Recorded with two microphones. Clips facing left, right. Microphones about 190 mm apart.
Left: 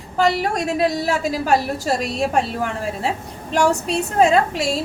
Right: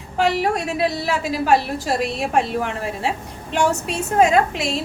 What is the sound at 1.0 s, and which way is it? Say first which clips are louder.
A woman's voice: even; 40° left (ahead or behind).